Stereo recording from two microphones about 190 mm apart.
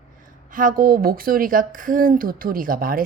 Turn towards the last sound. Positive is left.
turn(degrees=-50)  # may be behind; listen again after turning